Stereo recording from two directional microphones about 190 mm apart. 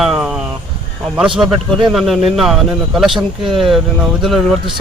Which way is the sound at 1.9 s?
Centre (ahead or behind).